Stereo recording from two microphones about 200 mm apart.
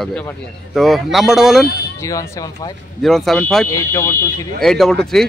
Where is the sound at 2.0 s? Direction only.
15° left (ahead or behind).